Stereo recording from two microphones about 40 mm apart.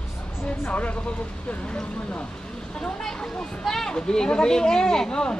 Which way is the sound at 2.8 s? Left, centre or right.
Centre.